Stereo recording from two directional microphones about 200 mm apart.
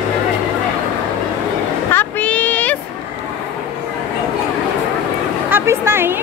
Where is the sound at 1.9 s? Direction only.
10° left (ahead or behind).